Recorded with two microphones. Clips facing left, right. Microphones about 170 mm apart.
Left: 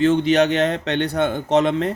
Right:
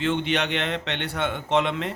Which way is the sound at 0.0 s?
40° left (ahead or behind).